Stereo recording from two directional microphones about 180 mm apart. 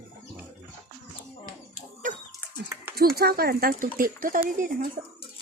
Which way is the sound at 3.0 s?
60° right (ahead or behind).